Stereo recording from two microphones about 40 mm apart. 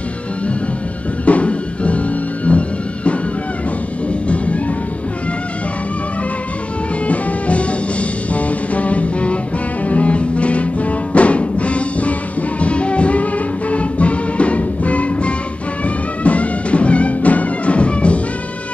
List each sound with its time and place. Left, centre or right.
1.2 s music: left
7.1 s music: left